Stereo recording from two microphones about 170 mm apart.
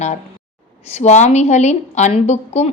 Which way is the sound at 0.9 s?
40° left (ahead or behind).